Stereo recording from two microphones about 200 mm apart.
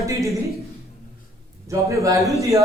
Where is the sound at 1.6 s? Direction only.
15° right (ahead or behind).